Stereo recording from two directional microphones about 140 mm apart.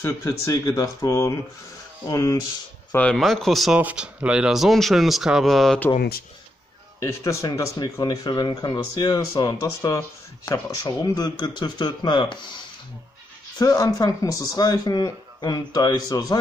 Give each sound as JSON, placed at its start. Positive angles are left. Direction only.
{"t": 0.0, "sound": "speech", "side_deg": 20}
{"t": 2.9, "sound": "speech", "side_deg": 10}
{"t": 7.0, "sound": "speech", "side_deg": 20}